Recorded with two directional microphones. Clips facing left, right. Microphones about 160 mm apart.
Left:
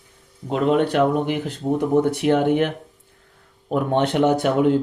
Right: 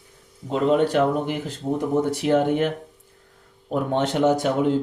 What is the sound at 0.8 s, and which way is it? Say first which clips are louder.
Speech: left 1 dB; 65° left (ahead or behind).